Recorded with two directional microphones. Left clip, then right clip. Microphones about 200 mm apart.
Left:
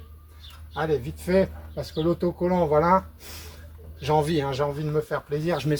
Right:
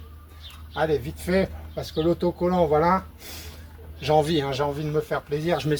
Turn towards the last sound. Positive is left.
turn(degrees=10)  # may be behind; listen again after turning